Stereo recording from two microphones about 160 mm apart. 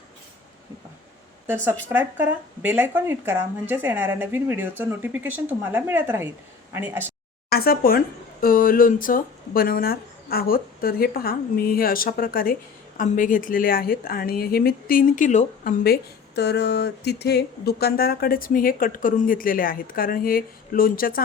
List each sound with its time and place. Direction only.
1.5 s speech: 15° right (ahead or behind)
7.5 s speech: 70° left (ahead or behind); by 15.7 s 50° left (ahead or behind)
15.8 s speech: 80° left; by 21.2 s 65° left (ahead or behind)